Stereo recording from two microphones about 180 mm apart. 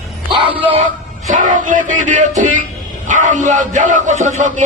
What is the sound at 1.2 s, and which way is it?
A man's voice, 45° right (ahead or behind).